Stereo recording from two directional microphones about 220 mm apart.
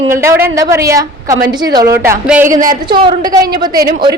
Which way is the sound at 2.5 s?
35° right (ahead or behind).